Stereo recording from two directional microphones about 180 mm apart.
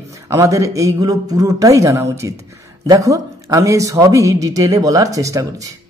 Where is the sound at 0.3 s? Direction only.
15° right (ahead or behind).